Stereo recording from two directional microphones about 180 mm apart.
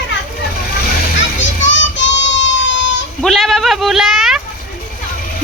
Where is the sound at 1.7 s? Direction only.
90° left.